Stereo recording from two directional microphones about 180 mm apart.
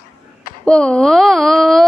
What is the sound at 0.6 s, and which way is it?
Speech, 5° left (ahead or behind).